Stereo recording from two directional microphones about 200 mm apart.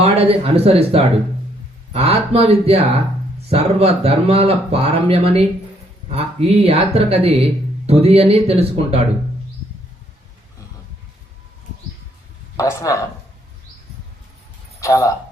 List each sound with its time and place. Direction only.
0.0 s speech: 30° right (ahead or behind)
12.5 s speech: 15° left (ahead or behind)
14.8 s speech: 15° left (ahead or behind)